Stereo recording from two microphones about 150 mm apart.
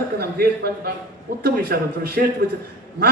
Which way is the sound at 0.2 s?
90° right.